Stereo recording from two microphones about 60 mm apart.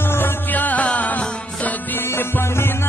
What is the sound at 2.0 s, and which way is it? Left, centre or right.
Music, left.